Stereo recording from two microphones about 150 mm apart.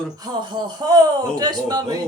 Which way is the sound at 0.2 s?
30° right (ahead or behind).